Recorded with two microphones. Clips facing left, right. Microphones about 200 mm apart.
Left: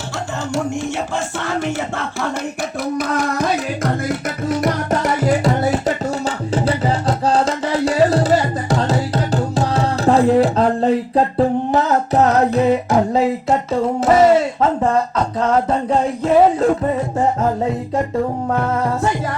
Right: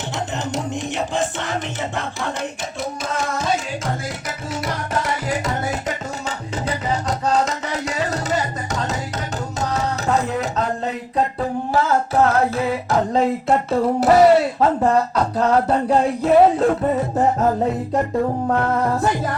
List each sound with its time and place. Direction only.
4.4 s music: 45° left (ahead or behind)
7.3 s tabla: 30° left (ahead or behind)
8.9 s music: 35° left (ahead or behind)
11.7 s singing: 20° left (ahead or behind)
13.7 s music: centre (ahead or behind)
15.4 s music: 5° right (ahead or behind)
18.4 s music: centre (ahead or behind)